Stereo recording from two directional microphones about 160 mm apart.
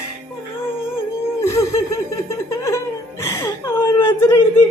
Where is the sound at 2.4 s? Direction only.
20° left (ahead or behind).